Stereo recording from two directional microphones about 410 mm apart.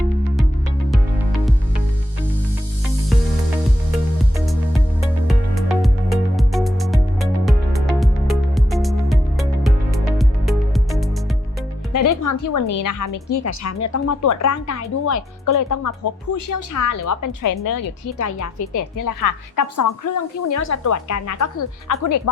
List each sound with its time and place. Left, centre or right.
5.3 s music: centre
11.9 s a woman's voice: left